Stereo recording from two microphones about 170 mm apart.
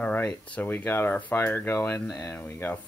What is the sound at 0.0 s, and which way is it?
Speech, 10° left (ahead or behind).